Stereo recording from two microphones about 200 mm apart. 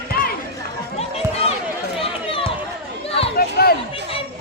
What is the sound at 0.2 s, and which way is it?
Chatter, 50° left (ahead or behind).